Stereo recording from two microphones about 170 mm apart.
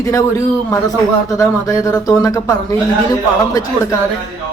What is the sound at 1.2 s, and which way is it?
Speech, 20° left (ahead or behind).